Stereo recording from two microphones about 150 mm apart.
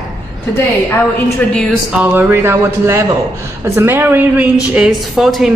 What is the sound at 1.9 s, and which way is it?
Speech, 10° right (ahead or behind).